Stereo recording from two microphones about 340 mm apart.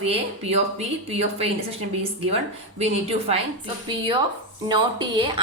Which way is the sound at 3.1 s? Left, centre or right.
Centre.